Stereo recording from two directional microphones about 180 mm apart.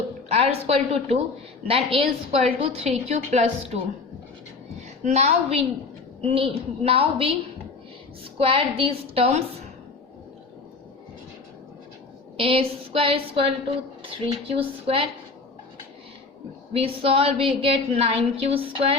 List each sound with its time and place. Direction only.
0.3 s a woman's voice: 35° right (ahead or behind)
5.0 s a woman's voice: 40° right (ahead or behind)
8.4 s a woman's voice: 30° right (ahead or behind)
12.4 s a woman's voice: 30° right (ahead or behind)
16.7 s a woman's voice: 30° right (ahead or behind)